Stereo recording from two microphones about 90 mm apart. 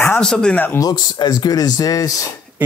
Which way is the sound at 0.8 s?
45° left (ahead or behind).